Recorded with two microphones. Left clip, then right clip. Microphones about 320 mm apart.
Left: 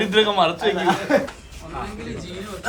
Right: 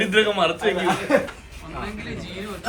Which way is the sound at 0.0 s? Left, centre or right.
Left.